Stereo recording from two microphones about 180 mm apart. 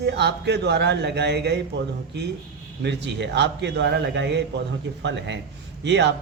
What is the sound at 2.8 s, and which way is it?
Speech, 75° right (ahead or behind).